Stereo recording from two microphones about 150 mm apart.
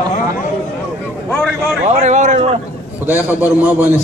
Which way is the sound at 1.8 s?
50° right (ahead or behind).